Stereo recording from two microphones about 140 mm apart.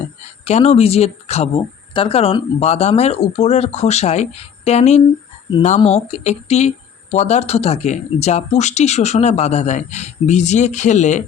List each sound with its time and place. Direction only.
0.4 s speech: 50° left (ahead or behind)